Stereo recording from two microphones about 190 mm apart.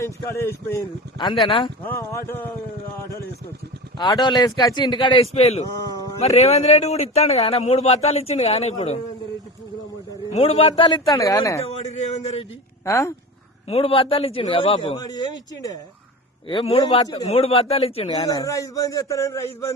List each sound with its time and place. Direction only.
0.0 s a man's voice: 15° left (ahead or behind)
1.5 s speech: 25° left (ahead or behind)
1.8 s a man's voice: 10° left (ahead or behind)
3.9 s a man's voice: 25° left (ahead or behind)
10.3 s speech: 30° left (ahead or behind)
11.6 s a man's voice: 35° left (ahead or behind)
12.8 s speech: 15° left (ahead or behind)
13.7 s speech: 30° left (ahead or behind)
14.9 s speech: 20° left (ahead or behind)
16.5 s a man's voice: 30° left (ahead or behind)
18.3 s a man's voice: 20° left (ahead or behind)